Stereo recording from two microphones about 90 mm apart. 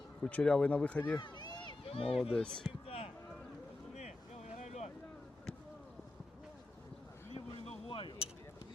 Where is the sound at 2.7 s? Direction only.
90° left.